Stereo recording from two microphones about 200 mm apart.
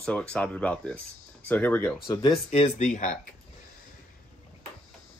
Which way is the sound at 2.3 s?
30° left (ahead or behind).